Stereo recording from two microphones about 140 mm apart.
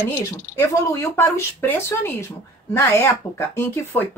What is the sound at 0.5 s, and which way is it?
Speech, 20° left (ahead or behind).